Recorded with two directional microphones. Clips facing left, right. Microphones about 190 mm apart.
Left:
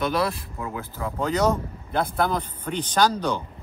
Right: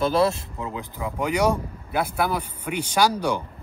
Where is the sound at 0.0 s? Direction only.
30° right (ahead or behind).